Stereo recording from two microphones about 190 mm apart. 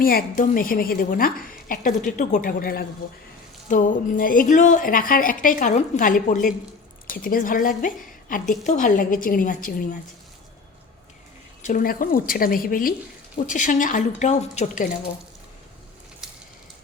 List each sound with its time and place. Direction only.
0.0 s a woman's voice: 50° left (ahead or behind)
11.6 s a woman's voice: 45° left (ahead or behind)